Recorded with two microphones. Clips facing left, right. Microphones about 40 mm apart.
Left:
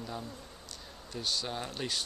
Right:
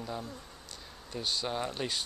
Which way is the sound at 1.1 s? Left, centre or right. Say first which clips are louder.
Right 2 dB; centre.